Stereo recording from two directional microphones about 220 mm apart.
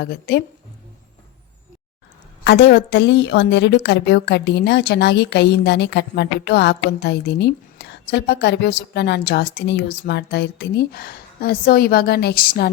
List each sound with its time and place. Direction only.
0.0 s a woman's voice: 50° left (ahead or behind)
2.4 s a woman's voice: 50° left (ahead or behind)